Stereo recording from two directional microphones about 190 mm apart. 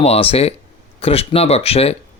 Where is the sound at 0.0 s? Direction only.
30° left (ahead or behind).